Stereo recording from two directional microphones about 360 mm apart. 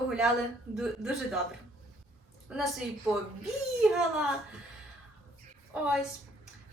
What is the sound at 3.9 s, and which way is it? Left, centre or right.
Speech, centre.